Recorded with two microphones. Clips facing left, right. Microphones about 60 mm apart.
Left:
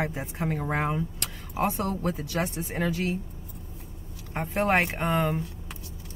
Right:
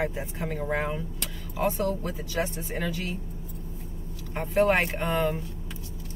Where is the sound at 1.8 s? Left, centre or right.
Left.